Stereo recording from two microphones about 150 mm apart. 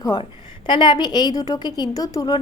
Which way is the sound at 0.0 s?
35° left (ahead or behind).